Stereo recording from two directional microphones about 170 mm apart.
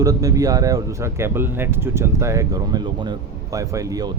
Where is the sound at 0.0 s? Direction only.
20° right (ahead or behind).